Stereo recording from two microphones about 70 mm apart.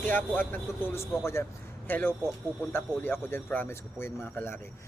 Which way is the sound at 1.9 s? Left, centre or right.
Left.